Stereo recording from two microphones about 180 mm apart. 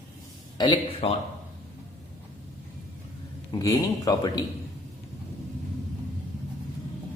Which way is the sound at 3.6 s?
20° left (ahead or behind).